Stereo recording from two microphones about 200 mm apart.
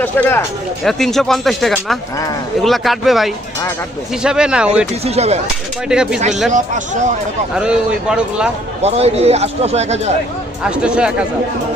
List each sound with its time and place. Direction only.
0.0 s speech: 10° left (ahead or behind)
5.0 s speech: 30° right (ahead or behind)
5.9 s speech: 5° right (ahead or behind)
6.5 s speech: 40° right (ahead or behind)
7.5 s speech: 5° right (ahead or behind)
8.8 s speech: 30° right (ahead or behind)
10.6 s speech: 5° right (ahead or behind)